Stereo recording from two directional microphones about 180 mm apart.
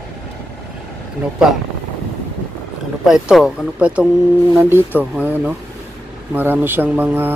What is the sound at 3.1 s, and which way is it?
Speech, 5° right (ahead or behind).